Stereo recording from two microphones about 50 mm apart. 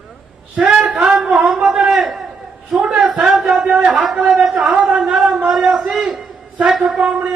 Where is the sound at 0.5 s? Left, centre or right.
Centre.